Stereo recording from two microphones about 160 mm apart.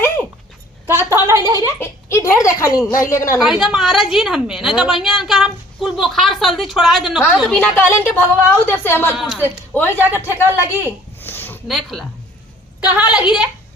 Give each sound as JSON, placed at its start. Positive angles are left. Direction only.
{"t": 0.9, "sound": "a woman's voice", "side_deg": -15}
{"t": 1.8, "sound": "a woman's voice", "side_deg": 20}
{"t": 3.3, "sound": "a woman's voice", "side_deg": -5}
{"t": 7.6, "sound": "a woman's voice", "side_deg": 10}
{"t": 9.1, "sound": "a woman's voice", "side_deg": 0}
{"t": 9.4, "sound": "a woman's voice", "side_deg": 10}
{"t": 11.2, "sound": "a sound", "side_deg": 15}
{"t": 11.7, "sound": "a woman's voice", "side_deg": 0}